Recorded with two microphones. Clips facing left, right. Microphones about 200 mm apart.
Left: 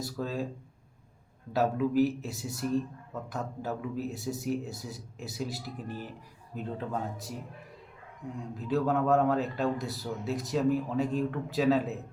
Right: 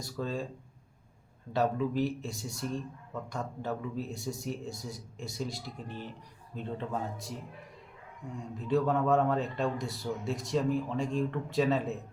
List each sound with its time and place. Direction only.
0.0 s a man's voice: 5° left (ahead or behind)
1.5 s a man's voice: 5° left (ahead or behind)